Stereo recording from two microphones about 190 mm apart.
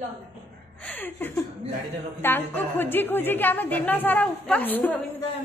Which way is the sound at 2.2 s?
10° left (ahead or behind).